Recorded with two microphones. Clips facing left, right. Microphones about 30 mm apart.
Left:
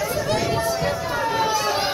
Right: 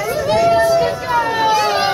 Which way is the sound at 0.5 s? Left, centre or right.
Right.